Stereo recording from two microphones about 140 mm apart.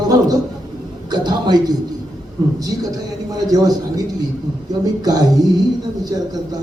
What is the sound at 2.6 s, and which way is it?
A man's voice, 25° right (ahead or behind).